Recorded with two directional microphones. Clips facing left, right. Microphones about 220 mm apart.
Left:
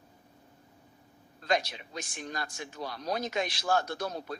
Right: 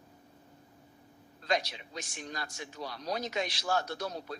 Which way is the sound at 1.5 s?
50° left (ahead or behind).